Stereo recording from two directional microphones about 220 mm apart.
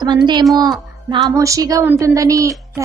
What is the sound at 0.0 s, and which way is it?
A woman's voice, 20° right (ahead or behind).